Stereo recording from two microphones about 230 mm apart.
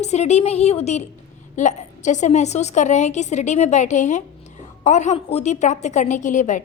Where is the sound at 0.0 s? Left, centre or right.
Left.